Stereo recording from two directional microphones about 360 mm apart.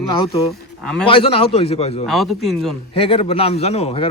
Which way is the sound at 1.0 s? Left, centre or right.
Centre.